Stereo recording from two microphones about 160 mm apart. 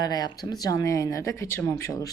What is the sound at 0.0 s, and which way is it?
A woman's voice, 25° left (ahead or behind).